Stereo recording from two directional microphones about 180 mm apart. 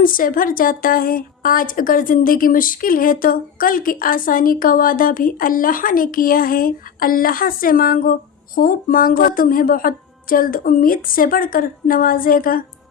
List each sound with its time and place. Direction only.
0.0 s a woman's voice: 50° left (ahead or behind)